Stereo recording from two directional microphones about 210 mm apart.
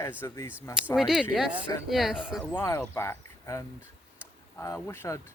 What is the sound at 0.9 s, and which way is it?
Speech, centre (ahead or behind).